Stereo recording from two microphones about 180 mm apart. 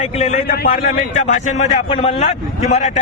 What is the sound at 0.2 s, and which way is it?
Speech, 40° left (ahead or behind).